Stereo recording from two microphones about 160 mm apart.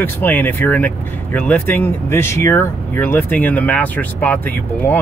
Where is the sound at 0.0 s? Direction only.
10° left (ahead or behind).